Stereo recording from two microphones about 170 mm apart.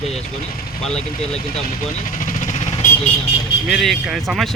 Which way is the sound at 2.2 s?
45° left (ahead or behind).